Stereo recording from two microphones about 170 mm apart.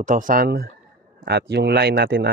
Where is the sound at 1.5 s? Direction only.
75° right (ahead or behind).